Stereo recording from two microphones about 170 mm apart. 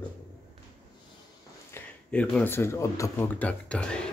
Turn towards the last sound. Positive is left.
turn(degrees=5)  # may be behind; listen again after turning